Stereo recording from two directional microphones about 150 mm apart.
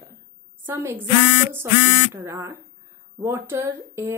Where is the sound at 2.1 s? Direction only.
20° right (ahead or behind).